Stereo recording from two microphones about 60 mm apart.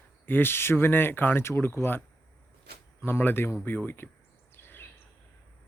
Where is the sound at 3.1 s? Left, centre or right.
Left.